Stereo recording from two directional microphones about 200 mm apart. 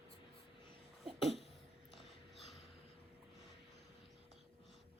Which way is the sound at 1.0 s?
Centre (ahead or behind).